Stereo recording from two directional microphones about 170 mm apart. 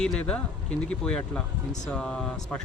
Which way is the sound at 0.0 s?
5° left (ahead or behind).